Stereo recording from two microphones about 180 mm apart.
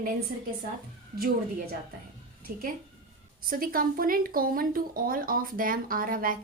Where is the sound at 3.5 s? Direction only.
50° right (ahead or behind).